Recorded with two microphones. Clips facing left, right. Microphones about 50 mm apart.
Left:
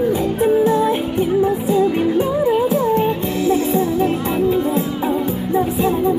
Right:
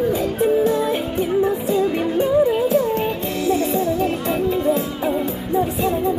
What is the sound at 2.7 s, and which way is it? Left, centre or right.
Music, centre.